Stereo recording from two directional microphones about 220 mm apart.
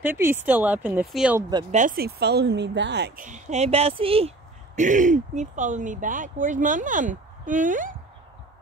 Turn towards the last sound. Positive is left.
turn(degrees=-35)  # may be behind; listen again after turning